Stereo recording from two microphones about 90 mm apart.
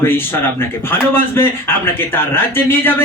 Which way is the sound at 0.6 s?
25° left (ahead or behind).